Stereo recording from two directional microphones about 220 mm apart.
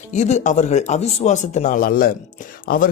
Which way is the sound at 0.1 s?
30° left (ahead or behind).